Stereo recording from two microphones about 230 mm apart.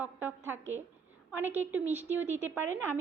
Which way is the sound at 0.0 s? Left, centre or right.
Centre.